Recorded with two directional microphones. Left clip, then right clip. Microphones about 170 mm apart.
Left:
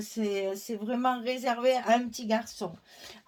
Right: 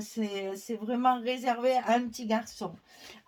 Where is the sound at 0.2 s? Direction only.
40° left (ahead or behind).